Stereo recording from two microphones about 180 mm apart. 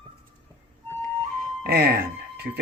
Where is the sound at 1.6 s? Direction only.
60° right (ahead or behind).